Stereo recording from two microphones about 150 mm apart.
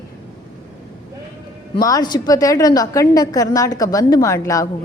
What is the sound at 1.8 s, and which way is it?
A woman's voice, 25° left (ahead or behind).